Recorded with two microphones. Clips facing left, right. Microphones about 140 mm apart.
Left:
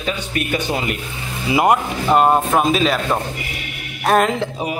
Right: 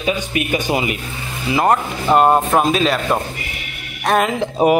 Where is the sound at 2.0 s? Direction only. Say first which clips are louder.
Right 2 dB; centre (ahead or behind).